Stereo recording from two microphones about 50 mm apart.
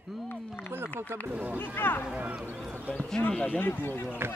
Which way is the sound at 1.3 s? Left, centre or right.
Right.